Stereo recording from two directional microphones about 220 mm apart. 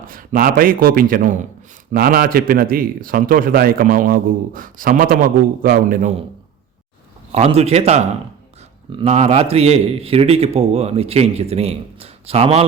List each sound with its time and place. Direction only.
0.1 s a man's voice: 40° right (ahead or behind)
7.3 s a man's voice: 30° right (ahead or behind)